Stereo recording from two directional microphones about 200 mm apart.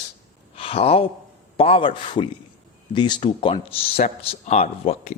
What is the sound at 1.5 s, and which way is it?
Speech, 30° left (ahead or behind).